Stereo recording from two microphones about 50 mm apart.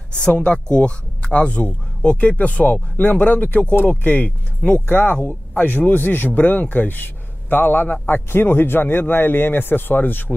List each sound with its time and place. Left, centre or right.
0.1 s speech: left